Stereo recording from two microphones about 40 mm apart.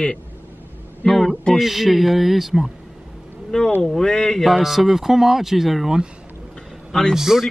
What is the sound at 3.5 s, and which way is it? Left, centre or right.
Speech, centre.